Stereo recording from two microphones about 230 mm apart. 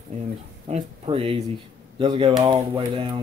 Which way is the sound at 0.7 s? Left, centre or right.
Right.